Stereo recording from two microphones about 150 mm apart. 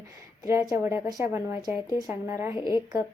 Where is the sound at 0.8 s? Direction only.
15° right (ahead or behind).